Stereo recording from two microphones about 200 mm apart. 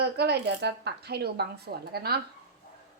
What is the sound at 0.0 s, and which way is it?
Speech, 55° right (ahead or behind).